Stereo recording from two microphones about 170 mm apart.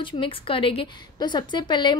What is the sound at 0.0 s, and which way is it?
A woman's voice, 30° left (ahead or behind).